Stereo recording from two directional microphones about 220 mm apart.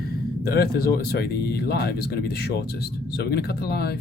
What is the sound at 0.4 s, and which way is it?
Speech, 45° left (ahead or behind).